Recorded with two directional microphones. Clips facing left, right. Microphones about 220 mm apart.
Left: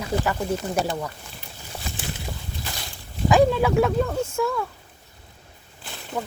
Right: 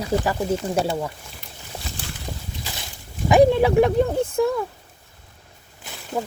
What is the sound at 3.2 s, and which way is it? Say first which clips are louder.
Speech: right 3 dB; 20° right (ahead or behind).